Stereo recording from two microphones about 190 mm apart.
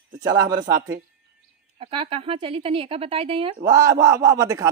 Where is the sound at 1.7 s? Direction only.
30° right (ahead or behind).